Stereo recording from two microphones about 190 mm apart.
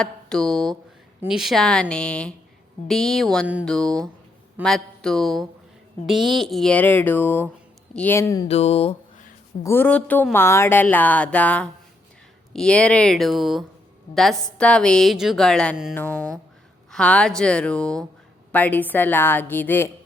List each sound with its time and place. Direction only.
0.0 s a woman's voice: 5° left (ahead or behind)
8.4 s a sound: 30° left (ahead or behind)
9.6 s a woman's voice: 10° left (ahead or behind)